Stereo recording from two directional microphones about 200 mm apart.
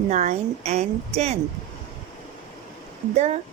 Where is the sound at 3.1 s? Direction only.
35° right (ahead or behind).